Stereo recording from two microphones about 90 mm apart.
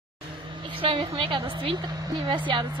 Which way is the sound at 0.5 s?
65° right (ahead or behind).